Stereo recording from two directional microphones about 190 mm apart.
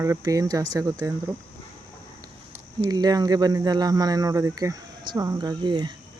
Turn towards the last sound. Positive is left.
turn(degrees=-25)  # may be behind; listen again after turning